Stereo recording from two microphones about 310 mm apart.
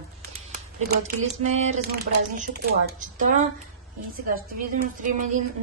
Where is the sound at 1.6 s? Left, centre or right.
Right.